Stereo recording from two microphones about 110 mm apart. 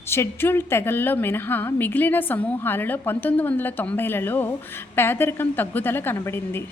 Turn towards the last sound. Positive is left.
turn(degrees=20)  # may be behind; listen again after turning